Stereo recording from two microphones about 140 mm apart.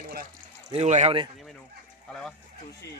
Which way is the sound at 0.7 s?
55° right (ahead or behind).